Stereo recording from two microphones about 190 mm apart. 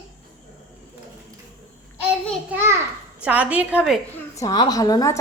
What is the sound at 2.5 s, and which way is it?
A woman's voice, 10° right (ahead or behind).